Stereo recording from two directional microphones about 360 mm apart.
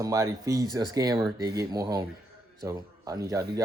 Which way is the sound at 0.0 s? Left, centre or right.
Centre.